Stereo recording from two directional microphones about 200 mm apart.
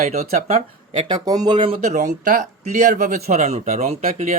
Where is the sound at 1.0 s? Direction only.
20° right (ahead or behind).